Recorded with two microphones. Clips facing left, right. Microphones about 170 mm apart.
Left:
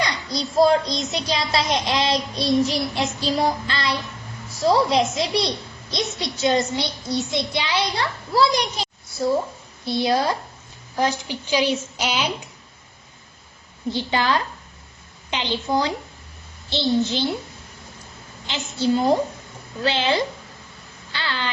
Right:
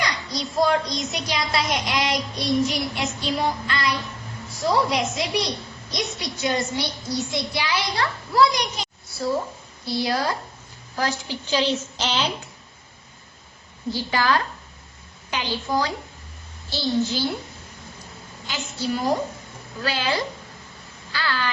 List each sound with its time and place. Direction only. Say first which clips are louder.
0.0 s a child's voice: left 2 dB; 30° left (ahead or behind); by 12.3 s 10° left (ahead or behind)
13.9 s a child's voice: even; 20° left (ahead or behind)
18.4 s a child's voice: left 5 dB; 25° left (ahead or behind)
21.1 s crow: right 1 dB; 25° left (ahead or behind)